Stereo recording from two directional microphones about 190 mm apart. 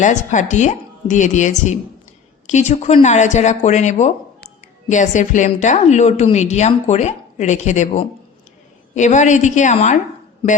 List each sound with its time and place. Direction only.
0.0 s a woman's voice: 40° left (ahead or behind)